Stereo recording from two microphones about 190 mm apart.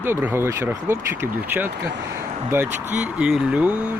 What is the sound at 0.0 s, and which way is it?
Speech, 10° right (ahead or behind).